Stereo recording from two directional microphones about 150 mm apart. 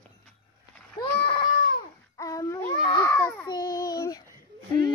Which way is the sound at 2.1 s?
25° left (ahead or behind).